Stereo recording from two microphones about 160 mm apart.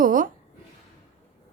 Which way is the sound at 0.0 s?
60° right (ahead or behind).